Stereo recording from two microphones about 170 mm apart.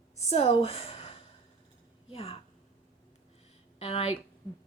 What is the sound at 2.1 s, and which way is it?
Speech, 35° left (ahead or behind).